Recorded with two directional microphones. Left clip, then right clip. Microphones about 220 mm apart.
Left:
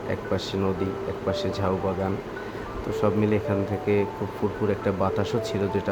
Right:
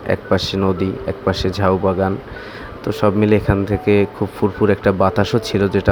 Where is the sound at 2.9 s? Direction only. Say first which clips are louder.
Right 9 dB; 35° right (ahead or behind).